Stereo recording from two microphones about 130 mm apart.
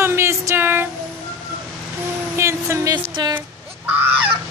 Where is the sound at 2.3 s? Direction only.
20° right (ahead or behind).